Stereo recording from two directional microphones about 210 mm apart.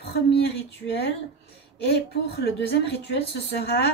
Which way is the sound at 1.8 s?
50° left (ahead or behind).